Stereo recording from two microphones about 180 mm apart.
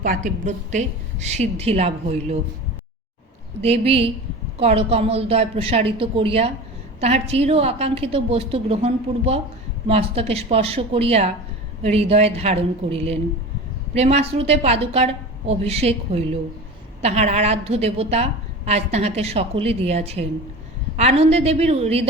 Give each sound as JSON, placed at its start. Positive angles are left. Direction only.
{"t": 0.0, "sound": "a woman's voice", "side_deg": -45}
{"t": 3.6, "sound": "a woman's voice", "side_deg": -35}